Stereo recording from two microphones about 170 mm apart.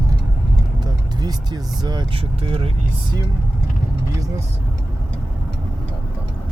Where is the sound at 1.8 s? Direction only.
25° right (ahead or behind).